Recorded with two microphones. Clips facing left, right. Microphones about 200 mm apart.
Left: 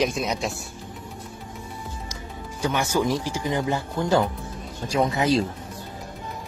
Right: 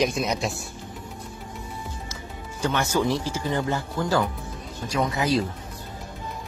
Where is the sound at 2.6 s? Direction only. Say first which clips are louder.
Even; 10° left (ahead or behind).